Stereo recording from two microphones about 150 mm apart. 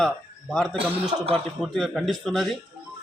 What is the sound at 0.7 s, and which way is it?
Speech, 40° right (ahead or behind).